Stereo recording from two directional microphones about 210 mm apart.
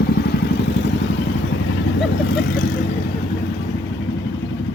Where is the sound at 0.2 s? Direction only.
50° left (ahead or behind).